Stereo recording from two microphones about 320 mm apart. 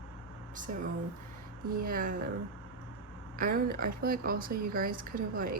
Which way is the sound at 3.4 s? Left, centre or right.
Right.